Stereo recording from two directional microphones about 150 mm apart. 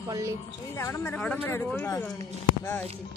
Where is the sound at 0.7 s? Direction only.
20° left (ahead or behind).